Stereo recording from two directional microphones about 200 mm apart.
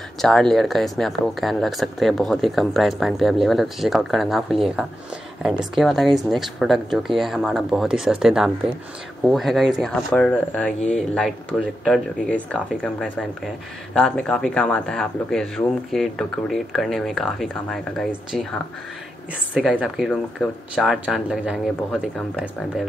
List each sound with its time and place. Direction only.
0.2 s speech: 5° left (ahead or behind)
19.5 s speech: 5° right (ahead or behind)